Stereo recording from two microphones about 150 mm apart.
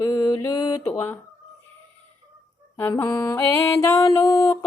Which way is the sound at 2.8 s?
15° left (ahead or behind).